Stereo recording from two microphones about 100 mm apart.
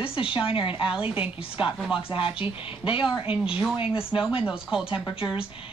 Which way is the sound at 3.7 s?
65° left (ahead or behind).